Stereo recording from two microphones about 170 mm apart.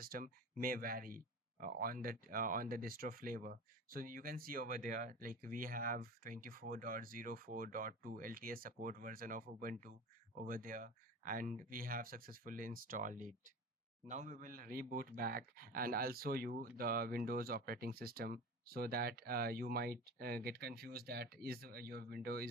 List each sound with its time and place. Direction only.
0.0 s speech: 60° right (ahead or behind)